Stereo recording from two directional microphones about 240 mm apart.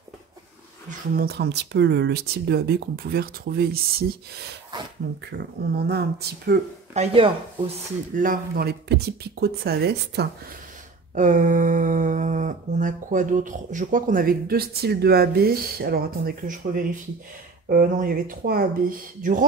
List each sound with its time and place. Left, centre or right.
0.8 s speech: right
5.8 s speech: right
6.9 s speech: right
11.1 s speech: right